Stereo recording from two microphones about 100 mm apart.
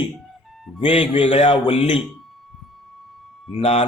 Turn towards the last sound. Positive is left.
turn(degrees=80)